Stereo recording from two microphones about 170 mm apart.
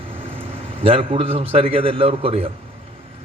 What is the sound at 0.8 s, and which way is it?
A man's voice, 35° right (ahead or behind).